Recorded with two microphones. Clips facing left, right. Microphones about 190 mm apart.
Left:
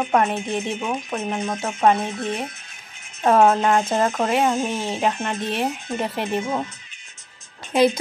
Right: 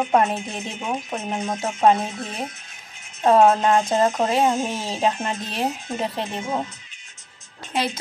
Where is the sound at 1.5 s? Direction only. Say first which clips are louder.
Right 1 dB; 20° right (ahead or behind).